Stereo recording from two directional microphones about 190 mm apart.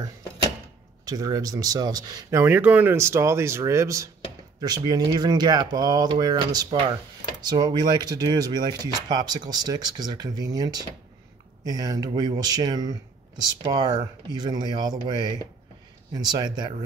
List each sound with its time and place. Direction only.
1.0 s speech: 20° right (ahead or behind)